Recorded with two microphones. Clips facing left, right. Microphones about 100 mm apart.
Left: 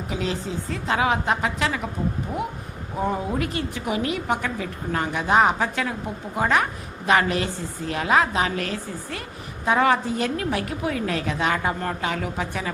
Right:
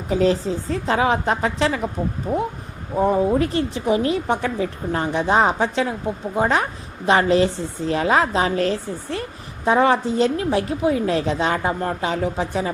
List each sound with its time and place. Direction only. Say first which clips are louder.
0.1 s a woman's voice: right 10 dB; 35° right (ahead or behind)